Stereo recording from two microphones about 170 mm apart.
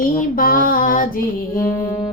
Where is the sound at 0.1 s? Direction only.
50° left (ahead or behind).